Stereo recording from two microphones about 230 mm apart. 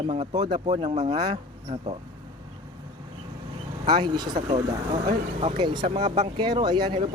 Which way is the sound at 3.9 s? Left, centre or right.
Centre.